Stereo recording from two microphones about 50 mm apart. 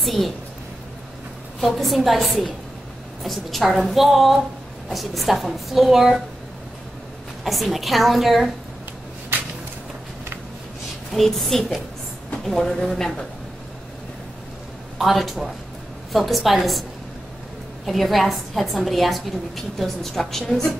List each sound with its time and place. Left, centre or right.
0.0 s a woman's voice: centre
1.6 s a woman's voice: centre
7.4 s a woman's voice: centre
11.1 s a woman's voice: centre
15.0 s a woman's voice: centre
17.8 s a woman's voice: centre